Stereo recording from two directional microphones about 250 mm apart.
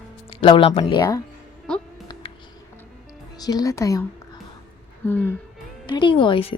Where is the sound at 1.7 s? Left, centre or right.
Centre.